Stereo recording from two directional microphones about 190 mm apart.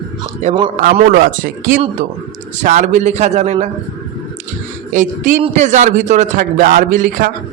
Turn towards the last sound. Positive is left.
turn(degrees=-45)  # may be behind; listen again after turning